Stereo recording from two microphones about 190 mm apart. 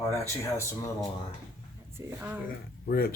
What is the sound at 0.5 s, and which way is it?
Speech, 15° left (ahead or behind).